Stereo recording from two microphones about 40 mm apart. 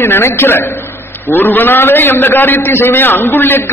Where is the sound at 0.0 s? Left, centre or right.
Left.